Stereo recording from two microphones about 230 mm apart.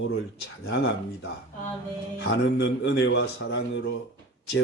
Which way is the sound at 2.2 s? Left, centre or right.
Left.